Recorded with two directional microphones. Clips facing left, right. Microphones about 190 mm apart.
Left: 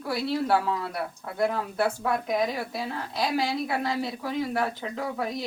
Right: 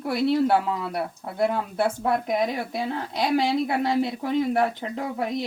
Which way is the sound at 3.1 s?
25° right (ahead or behind).